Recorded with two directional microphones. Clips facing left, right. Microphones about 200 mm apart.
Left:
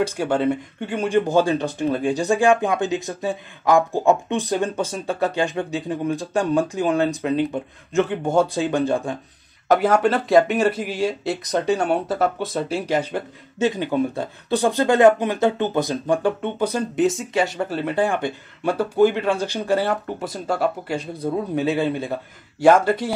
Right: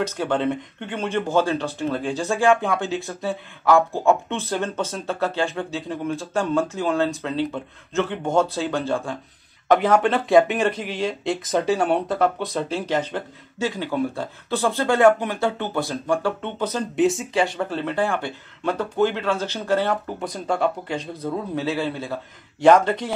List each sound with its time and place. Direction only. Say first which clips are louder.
0.0 s speech: left 2 dB; 10° left (ahead or behind)
9.7 s speech: left 1 dB; 5° left (ahead or behind)
13.6 s speech: left 4 dB; 20° left (ahead or behind)
16.9 s speech: right 4 dB; centre (ahead or behind); by 22.2 s 20° left (ahead or behind)
22.6 s speech: even; 10° left (ahead or behind)